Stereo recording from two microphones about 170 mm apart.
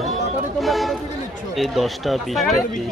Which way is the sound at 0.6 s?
Centre (ahead or behind).